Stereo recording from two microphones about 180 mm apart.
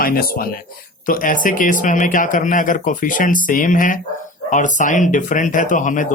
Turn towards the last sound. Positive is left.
turn(degrees=45)  # may be behind; listen again after turning